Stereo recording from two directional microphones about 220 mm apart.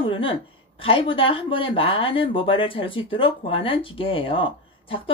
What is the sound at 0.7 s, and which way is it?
Speech, 25° left (ahead or behind).